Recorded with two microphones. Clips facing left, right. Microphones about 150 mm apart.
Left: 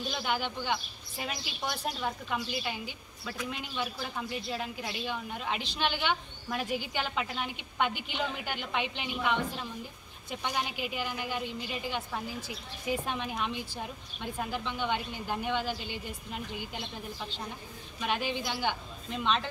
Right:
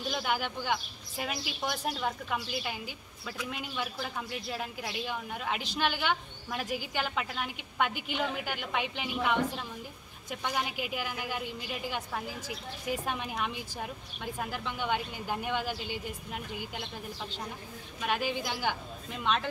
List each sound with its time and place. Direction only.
0.1 s a woman's voice: 5° right (ahead or behind)
18.0 s a woman's voice: 5° right (ahead or behind)